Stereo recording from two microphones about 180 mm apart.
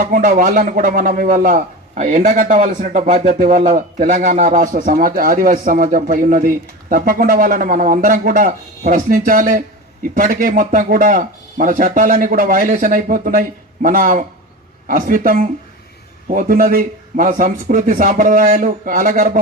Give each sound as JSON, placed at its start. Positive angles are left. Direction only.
{"t": 0.0, "sound": "speech", "side_deg": -45}